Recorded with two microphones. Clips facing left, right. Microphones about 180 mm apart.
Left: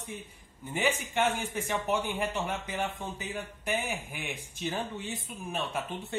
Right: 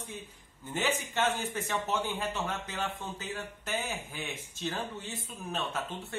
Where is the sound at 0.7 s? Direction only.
15° left (ahead or behind).